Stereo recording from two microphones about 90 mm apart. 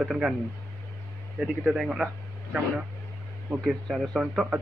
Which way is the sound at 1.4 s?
5° right (ahead or behind).